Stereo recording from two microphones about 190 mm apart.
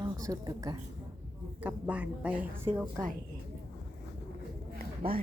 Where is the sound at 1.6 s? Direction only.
5° right (ahead or behind).